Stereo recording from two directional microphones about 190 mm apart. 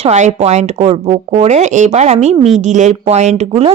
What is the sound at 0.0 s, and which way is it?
Speech, 35° right (ahead or behind).